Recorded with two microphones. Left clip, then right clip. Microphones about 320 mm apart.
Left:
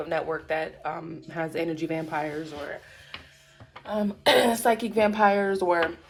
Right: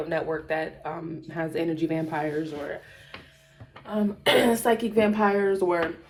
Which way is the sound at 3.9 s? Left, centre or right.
Left.